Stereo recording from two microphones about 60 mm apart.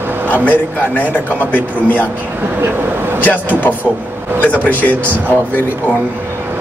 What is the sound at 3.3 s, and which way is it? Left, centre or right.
Speech, left.